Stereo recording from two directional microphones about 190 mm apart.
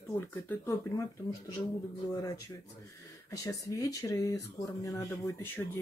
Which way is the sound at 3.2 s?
15° left (ahead or behind).